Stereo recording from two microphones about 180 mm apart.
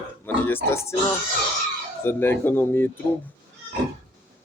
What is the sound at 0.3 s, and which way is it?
Speech, 10° left (ahead or behind).